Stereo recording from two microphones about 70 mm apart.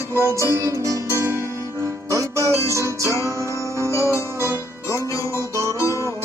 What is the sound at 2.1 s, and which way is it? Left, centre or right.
Music, right.